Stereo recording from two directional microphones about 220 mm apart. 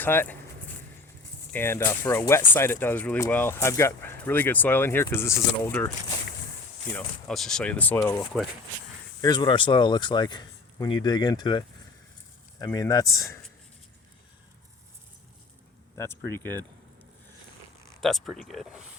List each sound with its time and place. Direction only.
0.0 s speech: 10° left (ahead or behind)
1.5 s speech: 10° left (ahead or behind)
6.9 s speech: 5° left (ahead or behind)
16.0 s speech: 10° left (ahead or behind)
18.0 s speech: centre (ahead or behind)